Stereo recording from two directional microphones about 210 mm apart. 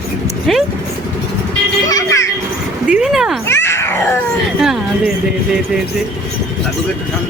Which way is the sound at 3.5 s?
10° left (ahead or behind).